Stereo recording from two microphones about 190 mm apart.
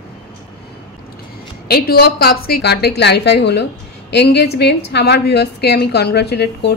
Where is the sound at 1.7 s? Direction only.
55° left (ahead or behind).